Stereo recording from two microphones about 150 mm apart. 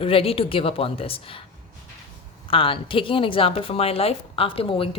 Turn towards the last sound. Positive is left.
turn(degrees=35)  # may be behind; listen again after turning